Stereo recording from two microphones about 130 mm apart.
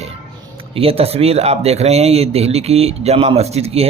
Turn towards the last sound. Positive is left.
turn(degrees=-50)  # may be behind; listen again after turning